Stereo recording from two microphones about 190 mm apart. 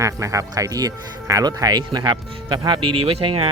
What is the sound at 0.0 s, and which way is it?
Speech, 15° right (ahead or behind).